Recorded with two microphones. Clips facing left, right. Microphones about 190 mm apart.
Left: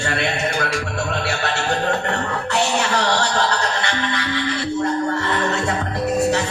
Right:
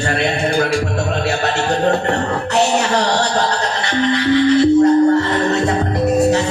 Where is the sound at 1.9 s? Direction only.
35° right (ahead or behind).